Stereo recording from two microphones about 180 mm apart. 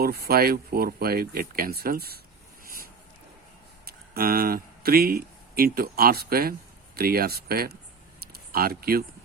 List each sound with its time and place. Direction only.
0.0 s speech: 60° right (ahead or behind)
3.8 s speech: 55° right (ahead or behind)